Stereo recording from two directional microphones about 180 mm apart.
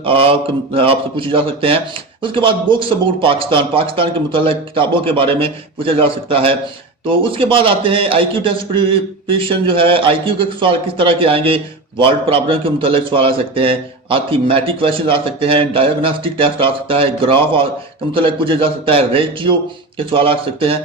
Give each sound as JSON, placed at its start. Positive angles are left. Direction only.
{"t": 0.0, "sound": "a man's voice", "side_deg": -30}